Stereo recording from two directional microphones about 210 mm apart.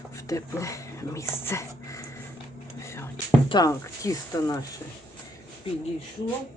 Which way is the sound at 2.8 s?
10° left (ahead or behind).